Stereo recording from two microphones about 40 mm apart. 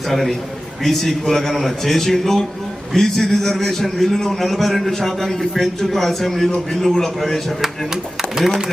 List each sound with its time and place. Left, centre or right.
0.1 s a man's voice: centre
8.4 s speech: centre